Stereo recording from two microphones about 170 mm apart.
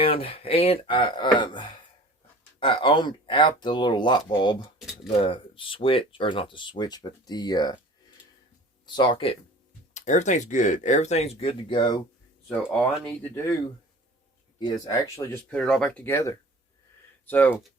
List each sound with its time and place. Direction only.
0.0 s speech: 35° left (ahead or behind)
9.0 s speech: 30° left (ahead or behind)
9.9 s speech: 45° left (ahead or behind); by 11.9 s 25° left (ahead or behind)
12.7 s speech: 5° left (ahead or behind)
14.6 s speech: 25° left (ahead or behind)
15.4 s speech: 5° left (ahead or behind)